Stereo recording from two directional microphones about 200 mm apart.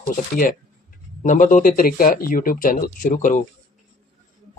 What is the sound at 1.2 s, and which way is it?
Speech, 40° left (ahead or behind).